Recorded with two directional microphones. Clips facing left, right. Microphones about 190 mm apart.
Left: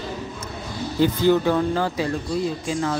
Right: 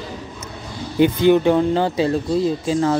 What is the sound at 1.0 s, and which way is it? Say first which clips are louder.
Speech: right 4 dB; 20° right (ahead or behind).